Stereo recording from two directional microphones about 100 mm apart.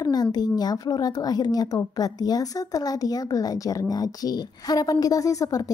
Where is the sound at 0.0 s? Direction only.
45° left (ahead or behind).